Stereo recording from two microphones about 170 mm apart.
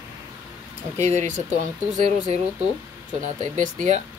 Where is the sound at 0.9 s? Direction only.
15° left (ahead or behind).